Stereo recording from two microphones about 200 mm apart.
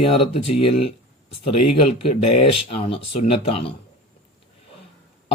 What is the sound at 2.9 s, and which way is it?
Speech, 30° left (ahead or behind).